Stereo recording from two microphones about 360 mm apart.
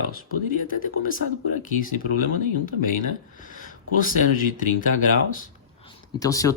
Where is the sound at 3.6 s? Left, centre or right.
Left.